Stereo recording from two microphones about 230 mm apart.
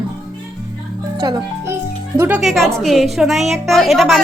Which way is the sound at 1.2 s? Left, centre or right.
Centre.